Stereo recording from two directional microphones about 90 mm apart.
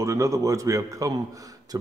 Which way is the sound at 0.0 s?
35° right (ahead or behind).